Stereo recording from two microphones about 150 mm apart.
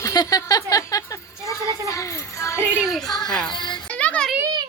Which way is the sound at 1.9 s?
20° left (ahead or behind).